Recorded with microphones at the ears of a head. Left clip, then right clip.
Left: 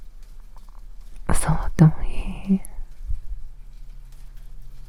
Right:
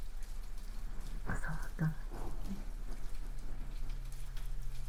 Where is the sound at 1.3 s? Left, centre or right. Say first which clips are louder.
Left 16 dB; left.